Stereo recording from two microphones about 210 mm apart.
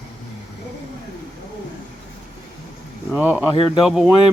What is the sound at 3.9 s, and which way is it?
Speech, 5° right (ahead or behind).